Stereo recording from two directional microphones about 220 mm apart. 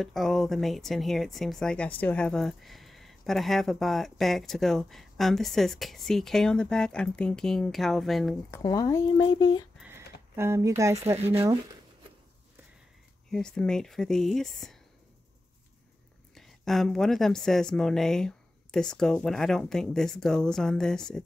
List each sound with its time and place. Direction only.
0.0 s speech: centre (ahead or behind)
8.5 s speech: 15° left (ahead or behind)
9.8 s a sound: 10° right (ahead or behind)
10.8 s speech: 15° right (ahead or behind)
13.3 s speech: 5° left (ahead or behind)
16.3 s speech: centre (ahead or behind)